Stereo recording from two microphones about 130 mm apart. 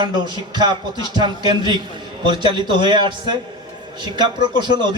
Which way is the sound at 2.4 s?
35° right (ahead or behind).